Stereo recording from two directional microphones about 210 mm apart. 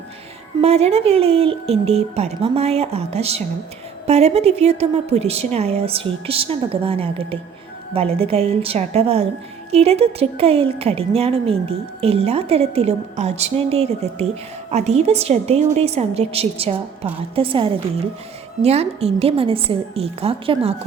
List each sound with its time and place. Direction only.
0.6 s speech: 30° right (ahead or behind)